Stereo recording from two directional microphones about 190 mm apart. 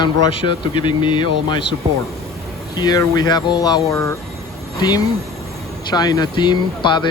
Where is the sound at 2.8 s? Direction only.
20° left (ahead or behind).